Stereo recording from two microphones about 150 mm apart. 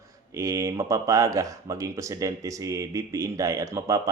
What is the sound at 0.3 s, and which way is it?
Speech, 20° right (ahead or behind).